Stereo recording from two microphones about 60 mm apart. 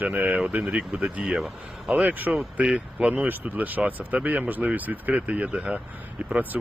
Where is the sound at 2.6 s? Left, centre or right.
Centre.